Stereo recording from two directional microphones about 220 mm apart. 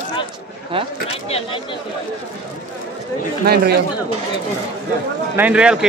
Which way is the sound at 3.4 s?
45° right (ahead or behind).